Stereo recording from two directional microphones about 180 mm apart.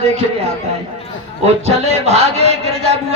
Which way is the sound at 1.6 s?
35° right (ahead or behind).